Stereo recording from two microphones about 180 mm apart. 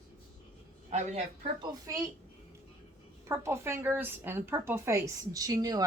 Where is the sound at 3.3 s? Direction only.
15° right (ahead or behind).